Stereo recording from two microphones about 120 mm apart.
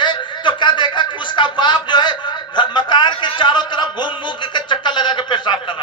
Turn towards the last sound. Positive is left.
turn(degrees=40)  # may be behind; listen again after turning